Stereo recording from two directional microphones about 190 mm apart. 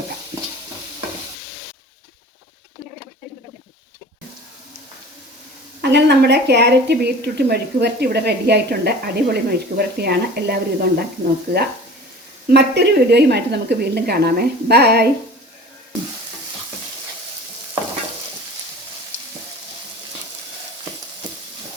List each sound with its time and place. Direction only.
5.8 s speech: 60° right (ahead or behind)
12.5 s speech: 60° right (ahead or behind)